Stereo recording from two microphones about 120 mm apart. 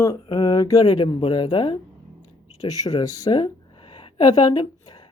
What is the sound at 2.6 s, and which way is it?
Speech, 30° left (ahead or behind).